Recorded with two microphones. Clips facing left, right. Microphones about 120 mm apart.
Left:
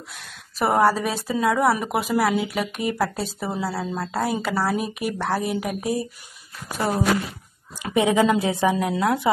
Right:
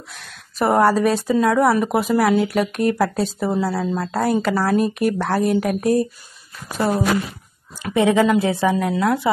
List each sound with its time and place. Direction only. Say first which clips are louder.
0.1 s speech: right 1 dB; centre (ahead or behind)
7.8 s speech: right 3 dB; 20° left (ahead or behind)